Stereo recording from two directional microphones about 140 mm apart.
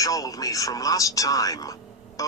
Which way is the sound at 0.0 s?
25° left (ahead or behind).